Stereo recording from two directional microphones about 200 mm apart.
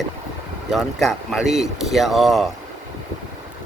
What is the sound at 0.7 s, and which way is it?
Speech, centre (ahead or behind).